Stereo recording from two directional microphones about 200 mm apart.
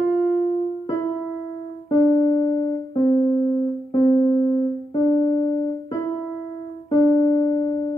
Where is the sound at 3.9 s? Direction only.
20° left (ahead or behind).